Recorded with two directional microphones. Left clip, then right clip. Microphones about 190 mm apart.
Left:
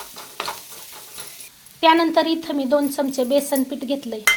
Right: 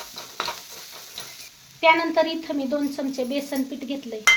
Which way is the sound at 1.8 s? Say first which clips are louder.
Left 3 dB; 45° left (ahead or behind).